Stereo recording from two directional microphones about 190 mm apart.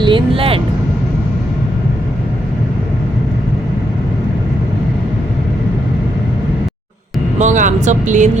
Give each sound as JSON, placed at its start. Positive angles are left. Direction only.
{"t": 0.0, "sound": "speech", "side_deg": -25}
{"t": 7.3, "sound": "speech", "side_deg": -40}